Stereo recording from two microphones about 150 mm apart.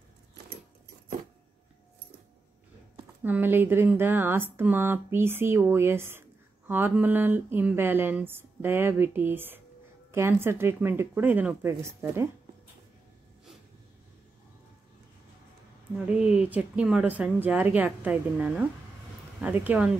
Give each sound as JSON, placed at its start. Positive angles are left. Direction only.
{"t": 3.3, "sound": "speech", "side_deg": -15}
{"t": 16.1, "sound": "speech", "side_deg": -5}